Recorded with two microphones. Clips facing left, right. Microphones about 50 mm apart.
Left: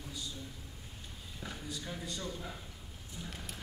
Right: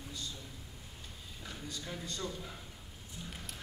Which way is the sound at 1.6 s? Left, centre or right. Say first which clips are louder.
Right 1 dB; centre.